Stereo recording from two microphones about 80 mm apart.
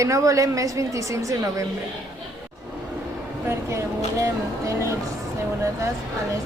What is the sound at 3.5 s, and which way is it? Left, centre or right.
Speech, right.